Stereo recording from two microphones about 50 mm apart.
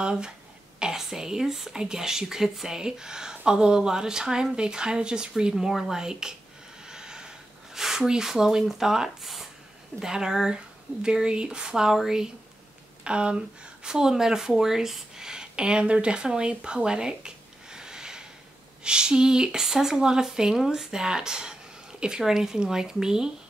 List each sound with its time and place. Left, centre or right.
0.0 s speech: centre
6.9 s a sound: centre
9.9 s speech: centre
13.0 s speech: right